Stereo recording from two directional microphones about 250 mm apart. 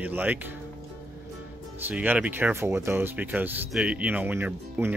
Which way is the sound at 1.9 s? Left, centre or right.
Centre.